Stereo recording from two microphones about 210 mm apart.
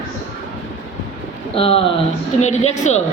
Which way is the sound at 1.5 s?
25° left (ahead or behind).